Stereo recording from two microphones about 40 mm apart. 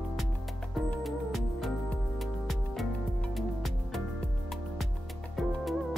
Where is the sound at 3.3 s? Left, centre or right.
Centre.